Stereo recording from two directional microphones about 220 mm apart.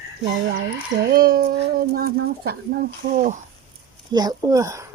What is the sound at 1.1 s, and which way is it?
Speech, 45° right (ahead or behind).